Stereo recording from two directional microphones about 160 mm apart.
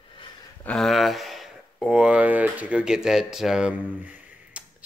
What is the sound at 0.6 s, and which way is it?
Speech, centre (ahead or behind).